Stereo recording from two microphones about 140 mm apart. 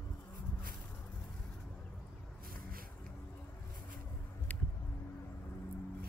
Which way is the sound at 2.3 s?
90° right.